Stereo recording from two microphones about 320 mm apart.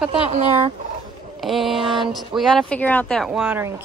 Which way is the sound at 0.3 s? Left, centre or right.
Right.